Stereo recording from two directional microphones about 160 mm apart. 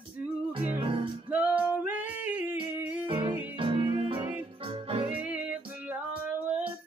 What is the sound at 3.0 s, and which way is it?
Music, 30° right (ahead or behind).